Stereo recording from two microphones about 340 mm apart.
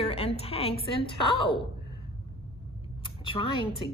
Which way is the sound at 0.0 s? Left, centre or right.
Centre.